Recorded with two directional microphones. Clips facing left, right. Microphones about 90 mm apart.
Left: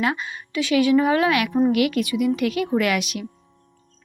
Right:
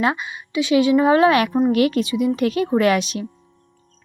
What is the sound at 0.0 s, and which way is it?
A woman's voice, 20° right (ahead or behind).